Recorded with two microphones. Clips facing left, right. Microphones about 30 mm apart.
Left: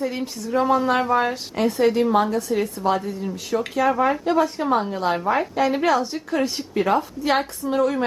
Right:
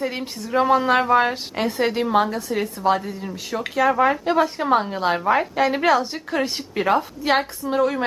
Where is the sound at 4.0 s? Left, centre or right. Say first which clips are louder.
Right 1 dB; right.